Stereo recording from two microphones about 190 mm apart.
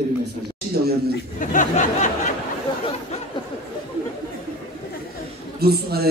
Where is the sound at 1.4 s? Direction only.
45° left (ahead or behind).